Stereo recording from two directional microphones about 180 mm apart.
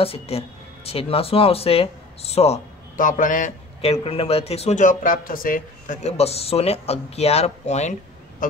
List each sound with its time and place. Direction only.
0.0 s speech: 30° left (ahead or behind)
3.8 s a man's voice: 35° left (ahead or behind)
8.4 s goose: 50° left (ahead or behind)